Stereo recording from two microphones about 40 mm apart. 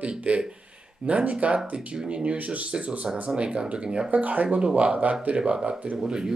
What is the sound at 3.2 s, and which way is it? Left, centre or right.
Speech, right.